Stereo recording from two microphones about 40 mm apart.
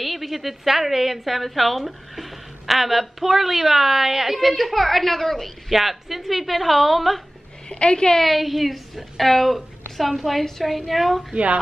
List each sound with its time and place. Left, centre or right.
0.0 s a woman's voice: centre
7.7 s a woman's voice: left
8.2 s a woman's voice: centre